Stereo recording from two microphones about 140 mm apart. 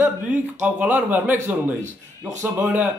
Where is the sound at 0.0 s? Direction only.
10° right (ahead or behind).